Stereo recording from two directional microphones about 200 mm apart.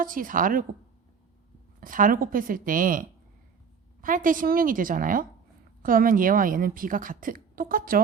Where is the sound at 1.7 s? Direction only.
40° right (ahead or behind).